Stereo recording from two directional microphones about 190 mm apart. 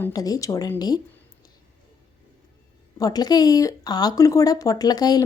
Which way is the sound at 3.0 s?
20° left (ahead or behind).